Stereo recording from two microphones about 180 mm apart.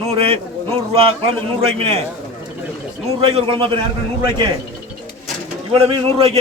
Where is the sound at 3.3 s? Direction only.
30° right (ahead or behind).